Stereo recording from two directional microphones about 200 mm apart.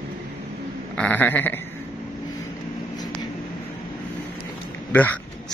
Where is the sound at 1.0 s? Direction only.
10° left (ahead or behind).